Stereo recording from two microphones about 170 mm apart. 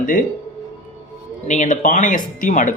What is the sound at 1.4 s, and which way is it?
Speech, 45° left (ahead or behind).